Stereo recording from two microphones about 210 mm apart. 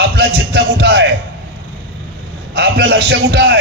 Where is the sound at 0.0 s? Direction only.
50° right (ahead or behind).